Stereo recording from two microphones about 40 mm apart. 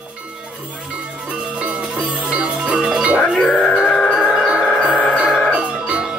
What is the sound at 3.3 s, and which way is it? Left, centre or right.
Music, centre.